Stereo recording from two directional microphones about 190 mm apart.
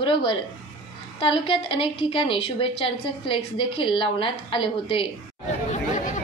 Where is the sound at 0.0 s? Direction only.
25° left (ahead or behind).